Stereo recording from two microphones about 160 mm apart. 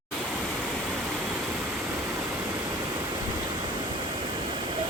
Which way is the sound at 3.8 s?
30° right (ahead or behind).